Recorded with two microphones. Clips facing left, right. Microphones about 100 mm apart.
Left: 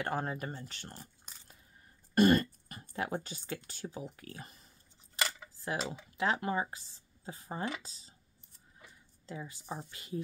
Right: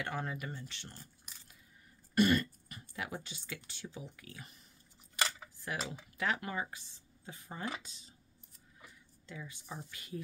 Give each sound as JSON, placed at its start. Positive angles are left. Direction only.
{"t": 0.0, "sound": "speech", "side_deg": 40}
{"t": 2.1, "sound": "speech", "side_deg": 40}
{"t": 5.6, "sound": "speech", "side_deg": 25}
{"t": 9.2, "sound": "speech", "side_deg": 35}